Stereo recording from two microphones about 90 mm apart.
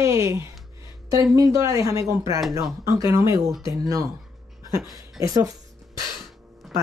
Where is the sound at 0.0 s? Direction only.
35° right (ahead or behind).